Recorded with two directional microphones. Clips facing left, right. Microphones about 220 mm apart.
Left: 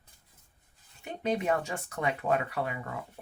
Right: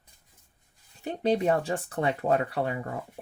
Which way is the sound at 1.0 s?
35° right (ahead or behind).